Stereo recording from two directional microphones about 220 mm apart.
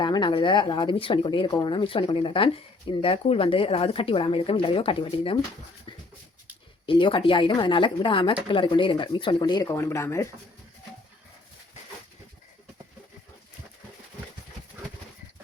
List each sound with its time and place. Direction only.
0.0 s speech: 20° left (ahead or behind)
6.8 s speech: 25° left (ahead or behind)